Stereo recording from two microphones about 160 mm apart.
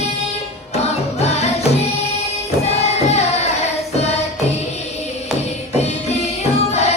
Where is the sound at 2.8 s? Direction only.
45° left (ahead or behind).